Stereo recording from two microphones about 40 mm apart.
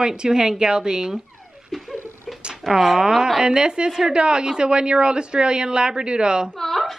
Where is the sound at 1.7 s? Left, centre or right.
Centre.